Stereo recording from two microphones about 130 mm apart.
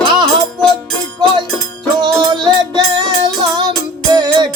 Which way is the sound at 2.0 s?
35° right (ahead or behind).